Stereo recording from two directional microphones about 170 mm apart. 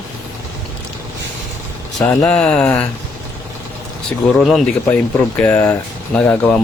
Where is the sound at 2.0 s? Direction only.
5° left (ahead or behind).